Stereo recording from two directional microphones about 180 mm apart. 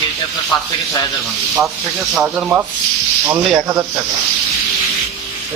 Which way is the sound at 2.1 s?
5° right (ahead or behind).